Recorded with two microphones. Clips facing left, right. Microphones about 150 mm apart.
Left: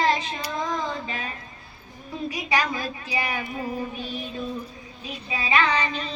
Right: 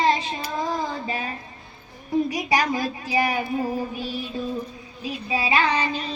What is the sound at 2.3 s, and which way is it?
Child singing, 40° right (ahead or behind).